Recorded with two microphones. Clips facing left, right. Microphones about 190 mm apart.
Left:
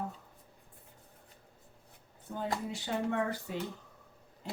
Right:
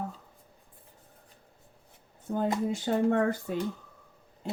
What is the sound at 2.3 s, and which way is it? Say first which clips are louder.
Speech: right 8 dB; 45° right (ahead or behind).